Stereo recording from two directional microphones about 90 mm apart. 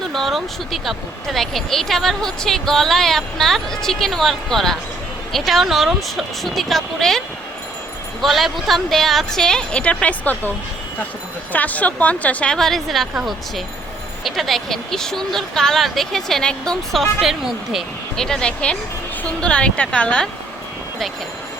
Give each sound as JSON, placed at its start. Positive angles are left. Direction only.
{"t": 0.1, "sound": "speech", "side_deg": 0}
{"t": 8.2, "sound": "speech", "side_deg": 0}
{"t": 11.5, "sound": "a woman's voice", "side_deg": 15}